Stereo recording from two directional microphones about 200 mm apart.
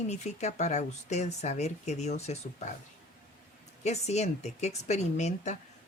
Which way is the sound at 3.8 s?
35° left (ahead or behind).